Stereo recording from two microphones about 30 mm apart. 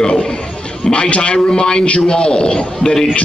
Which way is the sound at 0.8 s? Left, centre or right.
Left.